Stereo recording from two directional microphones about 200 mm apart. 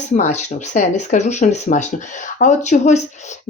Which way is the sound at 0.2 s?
35° left (ahead or behind).